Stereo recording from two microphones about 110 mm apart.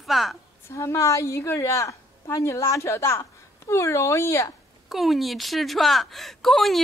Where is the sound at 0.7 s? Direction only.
25° left (ahead or behind).